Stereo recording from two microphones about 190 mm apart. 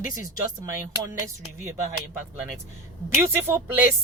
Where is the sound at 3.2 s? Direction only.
15° right (ahead or behind).